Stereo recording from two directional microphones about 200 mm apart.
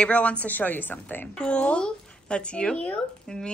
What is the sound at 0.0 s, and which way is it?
Speech, 5° left (ahead or behind).